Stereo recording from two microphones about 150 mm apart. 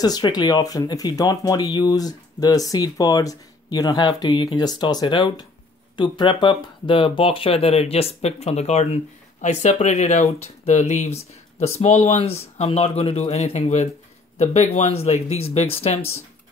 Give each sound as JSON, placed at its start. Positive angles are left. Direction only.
{"t": 0.0, "sound": "speech", "side_deg": 25}